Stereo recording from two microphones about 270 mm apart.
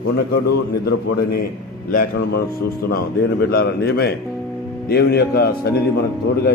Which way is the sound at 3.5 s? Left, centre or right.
Left.